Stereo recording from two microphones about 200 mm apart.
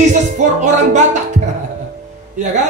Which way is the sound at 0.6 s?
35° right (ahead or behind).